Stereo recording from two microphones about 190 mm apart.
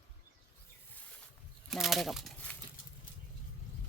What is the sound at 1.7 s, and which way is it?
Speech, centre (ahead or behind).